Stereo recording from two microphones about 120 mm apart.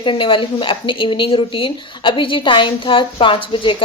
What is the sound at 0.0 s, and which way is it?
Speech, 45° left (ahead or behind).